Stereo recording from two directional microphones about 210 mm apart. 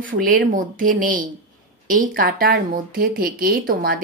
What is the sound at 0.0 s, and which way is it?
Speech, 40° right (ahead or behind).